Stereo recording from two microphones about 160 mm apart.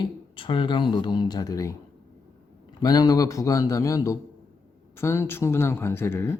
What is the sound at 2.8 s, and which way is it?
Speech, 25° left (ahead or behind).